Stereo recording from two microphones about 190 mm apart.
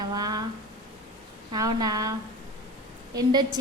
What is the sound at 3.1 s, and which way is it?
Speech, 20° right (ahead or behind).